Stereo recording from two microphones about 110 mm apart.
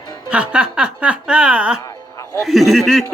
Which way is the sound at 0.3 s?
10° right (ahead or behind).